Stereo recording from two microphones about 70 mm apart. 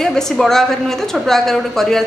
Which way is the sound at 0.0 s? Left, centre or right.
Centre.